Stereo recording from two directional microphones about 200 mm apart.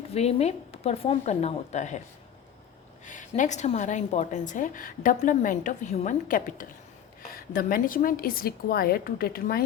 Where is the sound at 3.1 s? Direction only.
40° left (ahead or behind).